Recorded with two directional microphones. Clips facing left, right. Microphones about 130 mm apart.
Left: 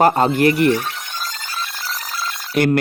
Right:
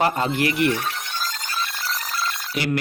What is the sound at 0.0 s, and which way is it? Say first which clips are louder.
Speech: left 7 dB; 45° left (ahead or behind).